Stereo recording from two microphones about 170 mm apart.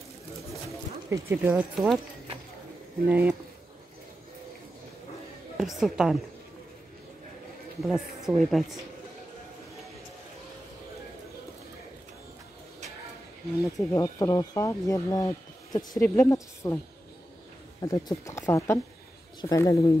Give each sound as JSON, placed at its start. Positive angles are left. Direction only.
{"t": 1.1, "sound": "speech", "side_deg": -10}
{"t": 3.1, "sound": "speech", "side_deg": -10}
{"t": 5.6, "sound": "speech", "side_deg": 0}
{"t": 7.8, "sound": "speech", "side_deg": 0}
{"t": 13.7, "sound": "speech", "side_deg": 20}
{"t": 17.8, "sound": "speech", "side_deg": 20}